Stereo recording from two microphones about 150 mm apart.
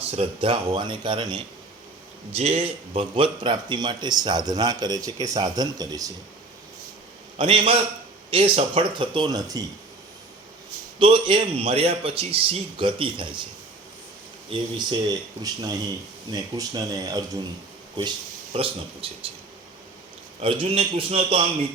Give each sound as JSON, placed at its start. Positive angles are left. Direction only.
{"t": 0.4, "sound": "a man's voice", "side_deg": -35}
{"t": 2.3, "sound": "speech", "side_deg": -45}
{"t": 7.3, "sound": "a man's voice", "side_deg": -35}
{"t": 11.0, "sound": "a man's voice", "side_deg": -35}
{"t": 14.5, "sound": "a man's voice", "side_deg": -30}
{"t": 20.4, "sound": "a man's voice", "side_deg": -40}